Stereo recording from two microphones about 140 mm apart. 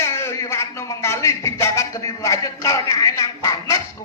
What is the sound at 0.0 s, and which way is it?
A man's voice, 20° left (ahead or behind).